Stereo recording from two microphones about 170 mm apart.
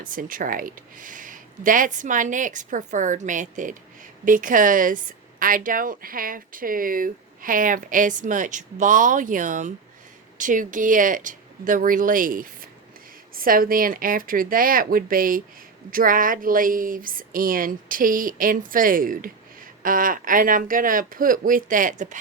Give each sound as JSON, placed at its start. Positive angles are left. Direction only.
{"t": 0.0, "sound": "a woman's voice", "side_deg": -55}